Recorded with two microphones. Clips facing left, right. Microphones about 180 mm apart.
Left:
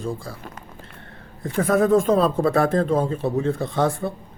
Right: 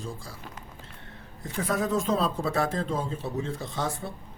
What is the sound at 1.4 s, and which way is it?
Speech, 55° left (ahead or behind).